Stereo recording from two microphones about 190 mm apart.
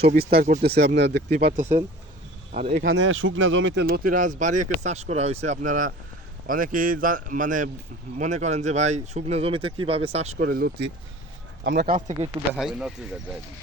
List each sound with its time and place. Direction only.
0.0 s speech: 55° right (ahead or behind)
0.6 s speech: 60° right (ahead or behind)
2.5 s speech: 35° right (ahead or behind)
2.8 s speech: 75° right (ahead or behind)
3.8 s speech: 50° right (ahead or behind); by 10.3 s 35° right (ahead or behind)
10.3 s speech: 50° right (ahead or behind)
12.5 s speech: 5° right (ahead or behind)